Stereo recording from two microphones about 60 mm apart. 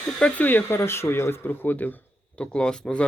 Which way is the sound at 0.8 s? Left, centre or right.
Left.